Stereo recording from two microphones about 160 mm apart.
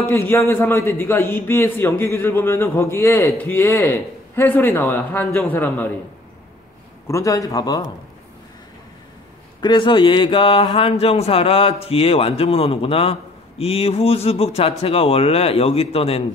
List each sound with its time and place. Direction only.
0.0 s a man's voice: 15° left (ahead or behind)
7.1 s a man's voice: 20° left (ahead or behind)
9.6 s a sound: 30° left (ahead or behind)